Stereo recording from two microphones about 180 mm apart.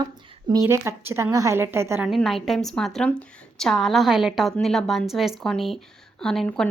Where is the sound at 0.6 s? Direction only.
15° right (ahead or behind).